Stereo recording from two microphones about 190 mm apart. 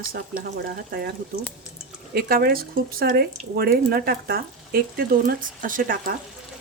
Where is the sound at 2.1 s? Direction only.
50° right (ahead or behind).